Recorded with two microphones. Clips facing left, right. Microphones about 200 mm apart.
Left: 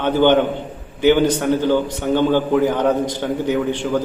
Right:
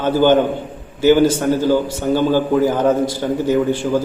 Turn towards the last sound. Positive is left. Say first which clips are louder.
# right 3 dB
turn(degrees=-10)  # may be behind; listen again after turning